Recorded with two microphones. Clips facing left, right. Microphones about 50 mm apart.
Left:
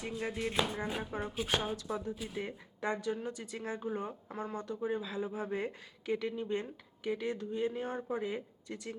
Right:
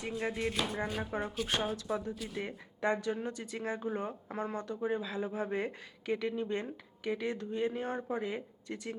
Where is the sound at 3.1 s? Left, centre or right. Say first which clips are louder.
Right 1 dB; right.